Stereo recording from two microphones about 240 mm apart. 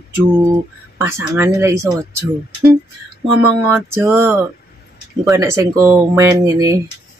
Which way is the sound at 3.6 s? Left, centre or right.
Centre.